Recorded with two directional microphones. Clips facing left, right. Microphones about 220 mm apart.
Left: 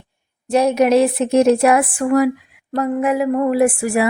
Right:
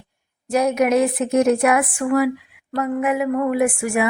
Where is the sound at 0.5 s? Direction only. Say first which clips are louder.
Left 3 dB; 30° left (ahead or behind).